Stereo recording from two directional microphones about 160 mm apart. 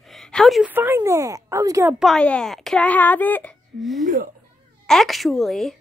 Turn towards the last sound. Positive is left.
turn(degrees=0)  # may be behind; listen again after turning